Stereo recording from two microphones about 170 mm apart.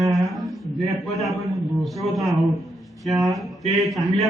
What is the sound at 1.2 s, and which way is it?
A man's voice, centre (ahead or behind).